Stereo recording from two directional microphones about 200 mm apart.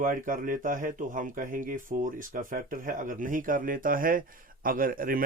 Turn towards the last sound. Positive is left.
turn(degrees=-45)  # may be behind; listen again after turning